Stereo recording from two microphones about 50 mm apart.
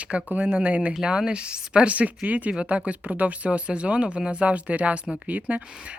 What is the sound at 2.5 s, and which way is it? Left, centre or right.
Speech, centre.